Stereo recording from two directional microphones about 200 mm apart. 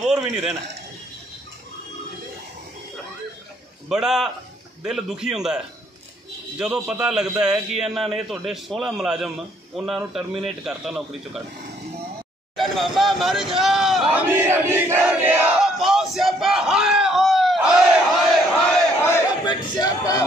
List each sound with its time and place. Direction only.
0.0 s a man's voice: centre (ahead or behind)
3.9 s a man's voice: 5° right (ahead or behind)
6.6 s a man's voice: 5° right (ahead or behind)
12.5 s speech: centre (ahead or behind)
13.6 s battle cry: centre (ahead or behind)
19.0 s chatter: 15° left (ahead or behind)